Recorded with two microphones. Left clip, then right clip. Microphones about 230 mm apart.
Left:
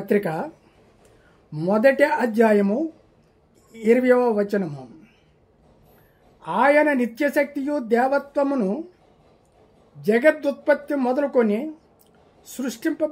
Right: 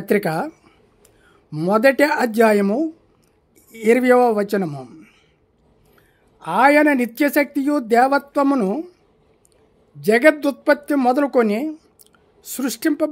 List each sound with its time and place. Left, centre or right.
0.0 s speech: right
6.4 s speech: right
9.9 s speech: right